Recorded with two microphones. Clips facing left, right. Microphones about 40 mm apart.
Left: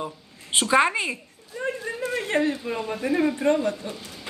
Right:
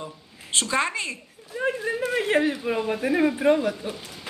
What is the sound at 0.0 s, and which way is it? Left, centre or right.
A woman's voice, centre.